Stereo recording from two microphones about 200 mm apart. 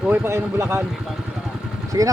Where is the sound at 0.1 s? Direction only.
15° right (ahead or behind).